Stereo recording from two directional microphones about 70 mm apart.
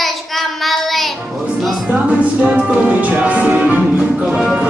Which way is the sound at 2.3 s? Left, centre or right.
Centre.